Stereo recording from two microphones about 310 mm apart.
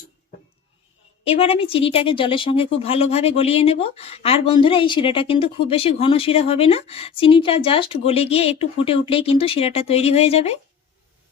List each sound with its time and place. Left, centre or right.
1.2 s speech: centre